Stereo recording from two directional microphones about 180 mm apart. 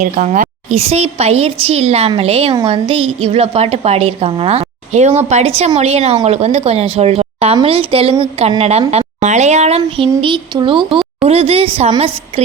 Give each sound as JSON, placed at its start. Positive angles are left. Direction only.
{"t": 0.0, "sound": "a woman's voice", "side_deg": -40}
{"t": 10.2, "sound": "a woman's voice", "side_deg": -25}